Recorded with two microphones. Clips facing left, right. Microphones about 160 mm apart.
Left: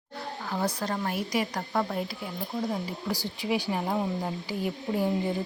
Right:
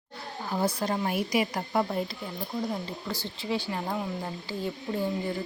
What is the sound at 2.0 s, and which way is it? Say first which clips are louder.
Speech: even; 5° left (ahead or behind).